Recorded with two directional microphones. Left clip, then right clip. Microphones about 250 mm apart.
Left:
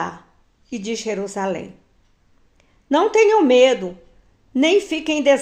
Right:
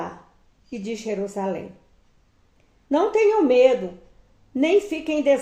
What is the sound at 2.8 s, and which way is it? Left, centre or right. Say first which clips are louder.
Speech: left 4 dB; left.